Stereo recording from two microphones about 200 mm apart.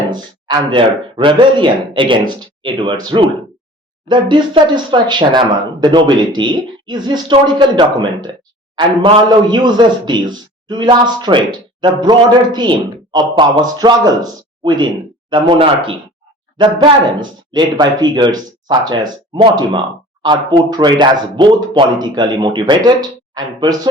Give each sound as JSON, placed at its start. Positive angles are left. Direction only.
{"t": 0.1, "sound": "speech", "side_deg": -20}